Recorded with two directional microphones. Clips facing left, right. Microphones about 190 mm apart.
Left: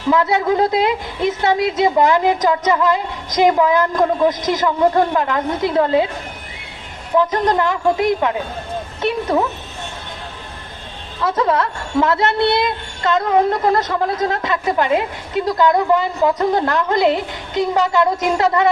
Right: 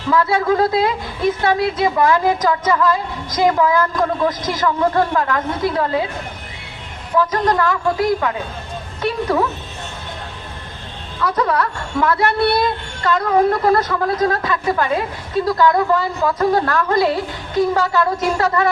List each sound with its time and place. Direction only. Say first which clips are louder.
0.1 s a woman's voice: even; 20° left (ahead or behind)
7.2 s a woman's voice: left 1 dB; 20° left (ahead or behind)
11.2 s a woman's voice: left 1 dB; 25° left (ahead or behind)